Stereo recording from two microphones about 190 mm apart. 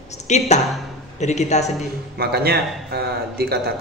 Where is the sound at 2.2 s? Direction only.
55° right (ahead or behind).